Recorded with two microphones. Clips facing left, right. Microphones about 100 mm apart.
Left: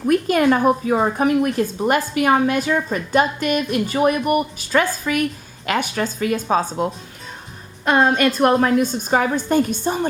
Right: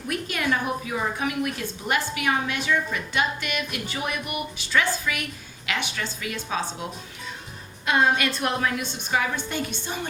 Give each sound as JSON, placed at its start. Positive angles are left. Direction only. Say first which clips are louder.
{"t": 0.1, "sound": "a woman's voice", "louder": "left 11 dB", "side_deg": 45}
{"t": 7.9, "sound": "a woman's voice", "louder": "left 6 dB", "side_deg": 45}